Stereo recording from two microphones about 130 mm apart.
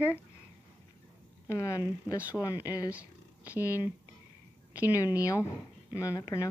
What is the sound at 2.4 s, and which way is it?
Speech, 25° left (ahead or behind).